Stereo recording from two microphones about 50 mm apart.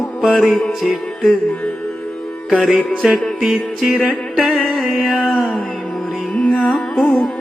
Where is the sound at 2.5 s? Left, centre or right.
Centre.